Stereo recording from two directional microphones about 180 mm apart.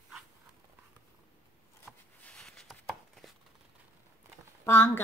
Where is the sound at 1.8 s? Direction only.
5° left (ahead or behind).